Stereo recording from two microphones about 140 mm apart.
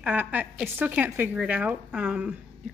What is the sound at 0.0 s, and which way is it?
Speech, 10° right (ahead or behind).